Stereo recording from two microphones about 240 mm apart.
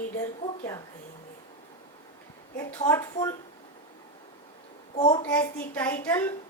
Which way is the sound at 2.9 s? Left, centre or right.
Centre.